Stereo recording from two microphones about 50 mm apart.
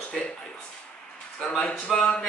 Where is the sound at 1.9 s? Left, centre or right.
Centre.